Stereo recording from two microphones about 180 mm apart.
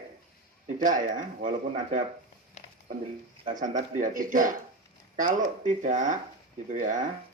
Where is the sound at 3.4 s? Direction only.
45° right (ahead or behind).